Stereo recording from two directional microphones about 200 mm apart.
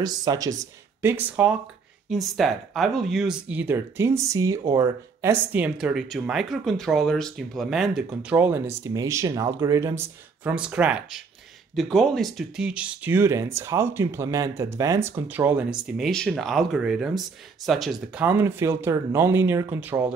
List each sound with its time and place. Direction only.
0.0 s speech: 20° right (ahead or behind)